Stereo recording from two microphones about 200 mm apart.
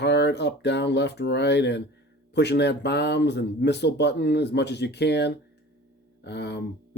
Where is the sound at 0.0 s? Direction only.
60° left (ahead or behind).